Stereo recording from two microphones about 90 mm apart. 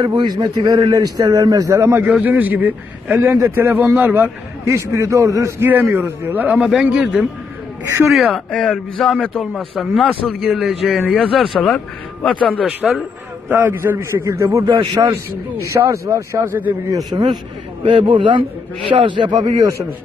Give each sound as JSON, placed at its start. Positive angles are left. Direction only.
{"t": 0.0, "sound": "a man's voice", "side_deg": -55}
{"t": 2.1, "sound": "a man's voice", "side_deg": -20}
{"t": 7.8, "sound": "speech", "side_deg": -30}
{"t": 8.1, "sound": "a man's voice", "side_deg": 0}
{"t": 13.5, "sound": "a man's voice", "side_deg": -25}
{"t": 17.1, "sound": "a man's voice", "side_deg": -45}
{"t": 17.8, "sound": "a man's voice", "side_deg": -65}
{"t": 19.3, "sound": "a man's voice", "side_deg": -45}